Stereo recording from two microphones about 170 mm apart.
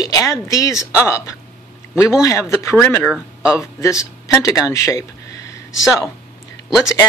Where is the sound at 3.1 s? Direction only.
5° right (ahead or behind).